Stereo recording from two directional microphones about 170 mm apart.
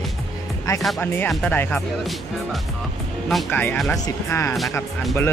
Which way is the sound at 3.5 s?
10° left (ahead or behind).